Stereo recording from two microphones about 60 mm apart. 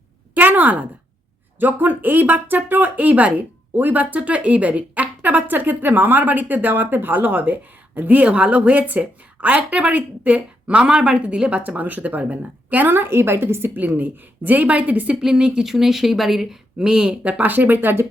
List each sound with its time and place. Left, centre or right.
0.3 s a sound: right
1.5 s speech: right
13.7 s speech: right
15.1 s a woman's voice: centre; by 18.0 s right